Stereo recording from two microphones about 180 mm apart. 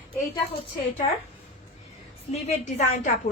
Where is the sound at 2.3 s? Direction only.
40° left (ahead or behind).